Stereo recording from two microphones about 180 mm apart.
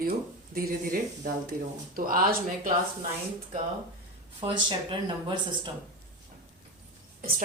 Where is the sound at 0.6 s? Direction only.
55° right (ahead or behind).